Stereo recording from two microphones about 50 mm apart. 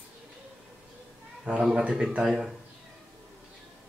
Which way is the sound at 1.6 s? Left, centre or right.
Centre.